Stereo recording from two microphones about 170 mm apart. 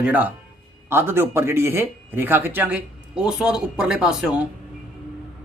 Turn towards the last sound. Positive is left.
turn(degrees=-5)  # may be behind; listen again after turning